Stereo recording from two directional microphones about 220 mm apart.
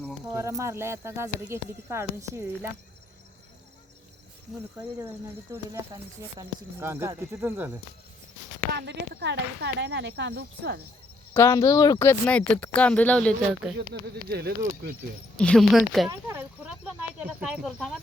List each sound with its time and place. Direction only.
0.3 s speech: 15° right (ahead or behind)
5.5 s speech: 15° right (ahead or behind)
8.7 s speech: 50° right (ahead or behind)
11.3 s speech: 15° left (ahead or behind)
14.3 s speech: 45° right (ahead or behind)
15.4 s speech: 5° left (ahead or behind)
16.0 s speech: 10° right (ahead or behind)
17.5 s speech: 5° right (ahead or behind)